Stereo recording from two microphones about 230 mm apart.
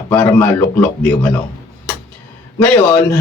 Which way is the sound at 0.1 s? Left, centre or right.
Centre.